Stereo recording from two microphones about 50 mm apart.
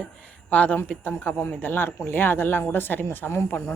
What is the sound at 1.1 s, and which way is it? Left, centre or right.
Speech, left.